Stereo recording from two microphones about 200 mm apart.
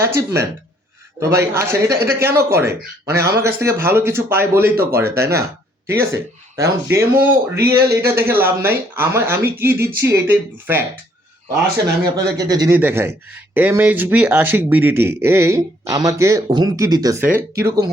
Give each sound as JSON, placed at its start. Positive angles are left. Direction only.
{"t": 0.0, "sound": "speech", "side_deg": -15}
{"t": 4.7, "sound": "speech", "side_deg": -50}
{"t": 4.9, "sound": "speech", "side_deg": -15}
{"t": 12.4, "sound": "speech", "side_deg": -20}